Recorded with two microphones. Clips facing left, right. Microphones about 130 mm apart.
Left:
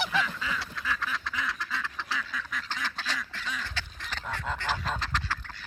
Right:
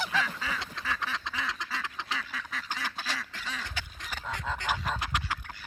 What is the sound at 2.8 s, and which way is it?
Duck, 10° right (ahead or behind).